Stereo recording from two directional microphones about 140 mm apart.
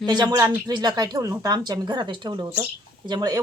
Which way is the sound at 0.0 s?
30° right (ahead or behind).